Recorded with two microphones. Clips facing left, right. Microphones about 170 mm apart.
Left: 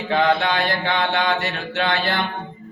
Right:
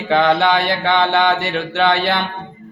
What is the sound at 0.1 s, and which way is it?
Speech, 70° right (ahead or behind).